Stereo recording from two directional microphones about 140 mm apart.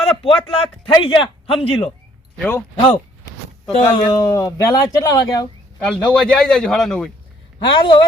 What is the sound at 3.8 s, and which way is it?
Speech, 25° left (ahead or behind).